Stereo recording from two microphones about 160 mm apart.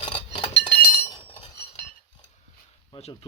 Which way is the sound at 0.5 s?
90° left.